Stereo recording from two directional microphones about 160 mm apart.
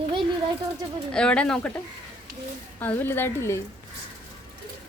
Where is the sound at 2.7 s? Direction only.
10° left (ahead or behind).